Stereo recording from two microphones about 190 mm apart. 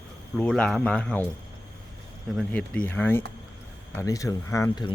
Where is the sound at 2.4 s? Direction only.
5° left (ahead or behind).